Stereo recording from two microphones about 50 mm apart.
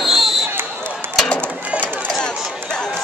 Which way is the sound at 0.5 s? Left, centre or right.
Right.